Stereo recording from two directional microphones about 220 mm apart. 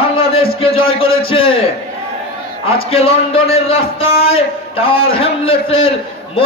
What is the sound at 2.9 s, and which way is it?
A man's voice, 25° left (ahead or behind).